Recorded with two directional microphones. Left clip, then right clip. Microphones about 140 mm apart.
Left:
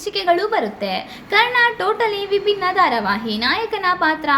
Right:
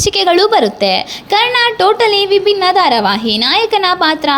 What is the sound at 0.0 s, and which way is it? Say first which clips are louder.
A woman's voice: right 8 dB; 65° right (ahead or behind).